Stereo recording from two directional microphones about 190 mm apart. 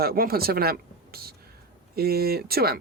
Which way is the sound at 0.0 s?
50° right (ahead or behind).